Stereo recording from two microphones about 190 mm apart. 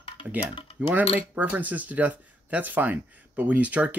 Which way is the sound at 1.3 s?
10° right (ahead or behind).